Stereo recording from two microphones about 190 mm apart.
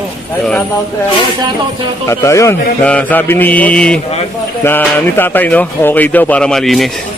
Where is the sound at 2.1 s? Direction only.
15° left (ahead or behind).